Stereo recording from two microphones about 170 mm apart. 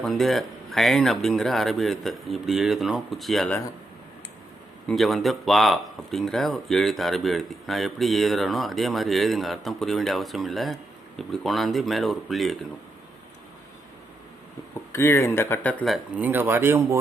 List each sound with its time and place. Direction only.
0.0 s speech: centre (ahead or behind)
4.9 s speech: centre (ahead or behind)
14.9 s speech: 15° left (ahead or behind)
16.1 s speech: 10° right (ahead or behind)